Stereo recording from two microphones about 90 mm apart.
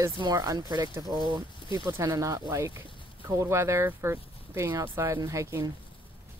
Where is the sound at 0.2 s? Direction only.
45° right (ahead or behind).